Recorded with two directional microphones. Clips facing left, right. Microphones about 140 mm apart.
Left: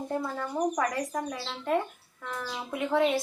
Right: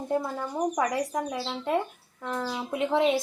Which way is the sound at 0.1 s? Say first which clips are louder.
Right 4 dB; 15° right (ahead or behind).